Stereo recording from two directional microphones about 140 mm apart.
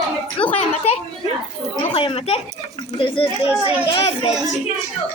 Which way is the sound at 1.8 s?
40° left (ahead or behind).